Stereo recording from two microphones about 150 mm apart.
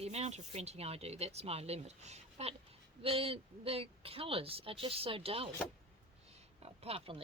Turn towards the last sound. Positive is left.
turn(degrees=-40)  # may be behind; listen again after turning